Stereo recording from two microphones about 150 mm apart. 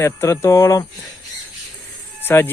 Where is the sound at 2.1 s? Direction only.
15° left (ahead or behind).